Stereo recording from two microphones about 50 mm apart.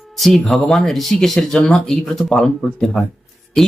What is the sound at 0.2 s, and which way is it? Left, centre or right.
Speech, centre.